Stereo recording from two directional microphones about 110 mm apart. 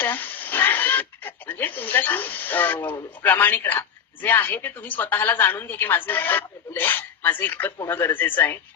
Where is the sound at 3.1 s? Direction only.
15° left (ahead or behind).